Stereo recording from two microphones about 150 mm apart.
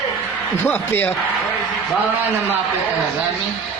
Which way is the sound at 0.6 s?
15° left (ahead or behind).